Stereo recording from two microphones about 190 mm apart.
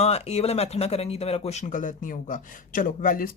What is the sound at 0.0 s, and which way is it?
Speech, 35° left (ahead or behind).